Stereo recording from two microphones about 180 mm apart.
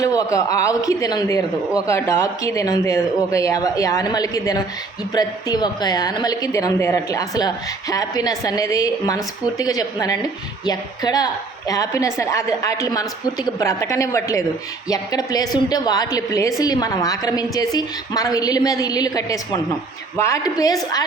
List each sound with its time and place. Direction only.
0.0 s a woman's voice: 20° left (ahead or behind)